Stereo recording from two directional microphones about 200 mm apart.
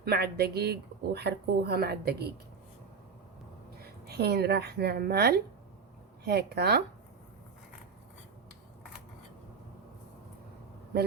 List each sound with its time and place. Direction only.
0.0 s speech: 50° right (ahead or behind)
4.0 s speech: 55° right (ahead or behind)